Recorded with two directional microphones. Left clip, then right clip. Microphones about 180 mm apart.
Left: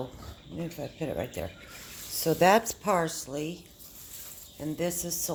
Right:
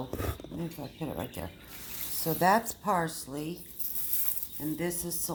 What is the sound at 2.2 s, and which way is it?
Speech, 45° left (ahead or behind).